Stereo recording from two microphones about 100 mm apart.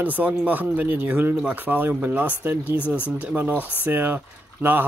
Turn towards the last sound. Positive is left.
turn(degrees=-20)  # may be behind; listen again after turning